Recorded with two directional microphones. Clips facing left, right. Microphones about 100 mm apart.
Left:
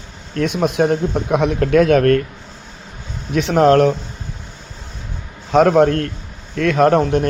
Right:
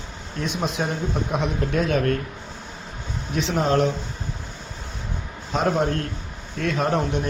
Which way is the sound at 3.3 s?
60° left (ahead or behind).